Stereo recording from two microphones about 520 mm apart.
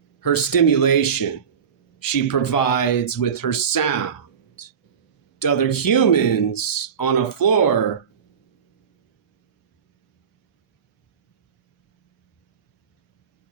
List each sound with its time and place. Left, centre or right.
0.2 s speech: left
4.6 s a sound: left
5.4 s speech: left